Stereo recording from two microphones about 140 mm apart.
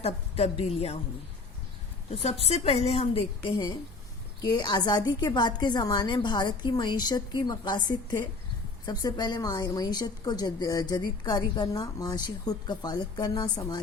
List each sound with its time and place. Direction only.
0.0 s a woman's voice: 45° left (ahead or behind)
2.4 s a woman's voice: 45° left (ahead or behind); by 13.7 s 30° left (ahead or behind)